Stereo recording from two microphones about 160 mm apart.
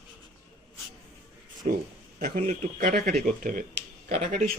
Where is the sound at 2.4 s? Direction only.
50° right (ahead or behind).